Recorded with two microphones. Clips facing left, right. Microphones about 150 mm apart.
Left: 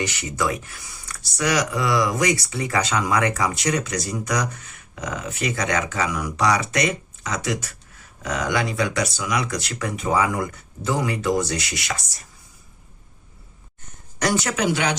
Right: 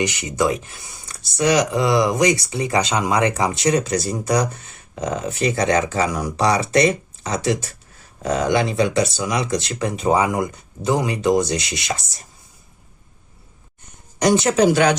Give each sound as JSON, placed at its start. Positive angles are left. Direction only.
{"t": 0.0, "sound": "speech", "side_deg": -20}
{"t": 14.2, "sound": "speech", "side_deg": -20}